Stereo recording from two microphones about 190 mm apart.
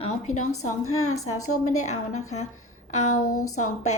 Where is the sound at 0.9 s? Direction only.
90° left.